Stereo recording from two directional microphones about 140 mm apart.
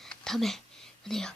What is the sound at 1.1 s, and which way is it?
Speech, 5° left (ahead or behind).